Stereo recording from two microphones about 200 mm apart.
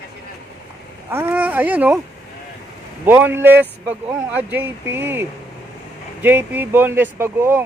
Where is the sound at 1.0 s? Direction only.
10° right (ahead or behind).